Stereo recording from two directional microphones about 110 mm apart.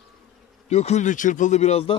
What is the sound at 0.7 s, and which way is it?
Speech, 80° left.